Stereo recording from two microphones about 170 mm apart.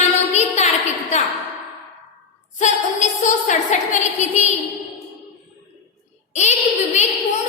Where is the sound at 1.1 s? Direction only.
45° left (ahead or behind).